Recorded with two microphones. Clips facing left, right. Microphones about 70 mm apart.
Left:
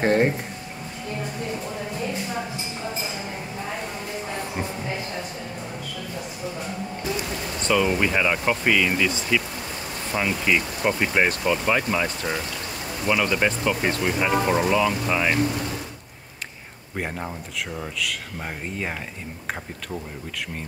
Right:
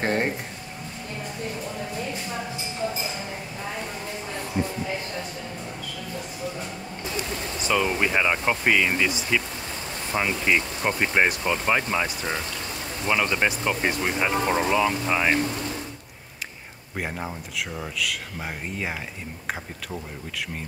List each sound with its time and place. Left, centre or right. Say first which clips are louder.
0.0 s music: left 5 dB; centre
7.6 s speech: left 2 dB; centre
16.9 s speech: left 1 dB; centre